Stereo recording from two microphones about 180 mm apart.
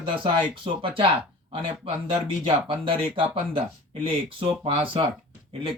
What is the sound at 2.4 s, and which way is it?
Speech, 30° right (ahead or behind).